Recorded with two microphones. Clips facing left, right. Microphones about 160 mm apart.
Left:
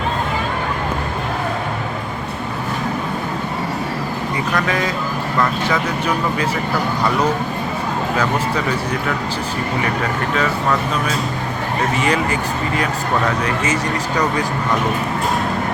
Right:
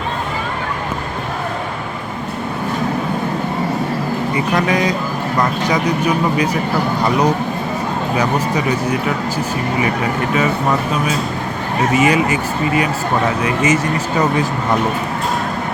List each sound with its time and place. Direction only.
4.5 s speech: 20° right (ahead or behind)
8.1 s speech: 15° right (ahead or behind)
11.9 s speech: 10° right (ahead or behind)